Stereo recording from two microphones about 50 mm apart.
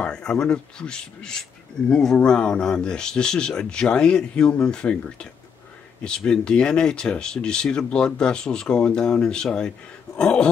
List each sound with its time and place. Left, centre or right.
0.0 s speech: centre
6.0 s speech: centre